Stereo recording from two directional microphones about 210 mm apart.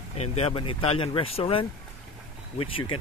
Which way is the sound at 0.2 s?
30° left (ahead or behind).